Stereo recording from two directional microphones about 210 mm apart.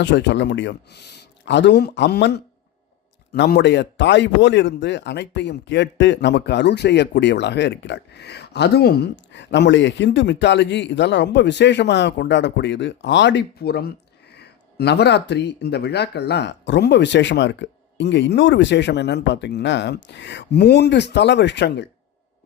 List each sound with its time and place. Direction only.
0.0 s speech: 55° left (ahead or behind)